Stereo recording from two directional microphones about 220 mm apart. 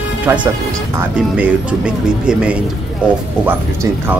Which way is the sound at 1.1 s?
5° right (ahead or behind).